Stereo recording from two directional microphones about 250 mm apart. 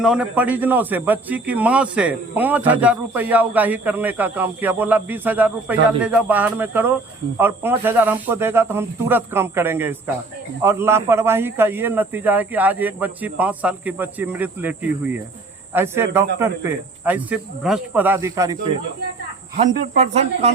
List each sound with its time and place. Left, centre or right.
0.0 s speech: centre
19.5 s speech: right